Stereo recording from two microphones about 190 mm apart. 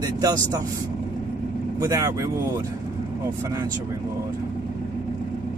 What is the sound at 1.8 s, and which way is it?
Speech, 15° right (ahead or behind).